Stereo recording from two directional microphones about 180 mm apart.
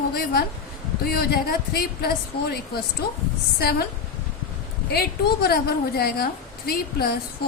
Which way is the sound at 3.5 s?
60° left (ahead or behind).